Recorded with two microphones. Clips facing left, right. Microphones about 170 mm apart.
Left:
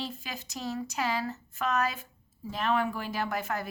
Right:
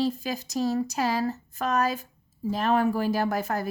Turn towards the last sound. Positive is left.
turn(degrees=-40)  # may be behind; listen again after turning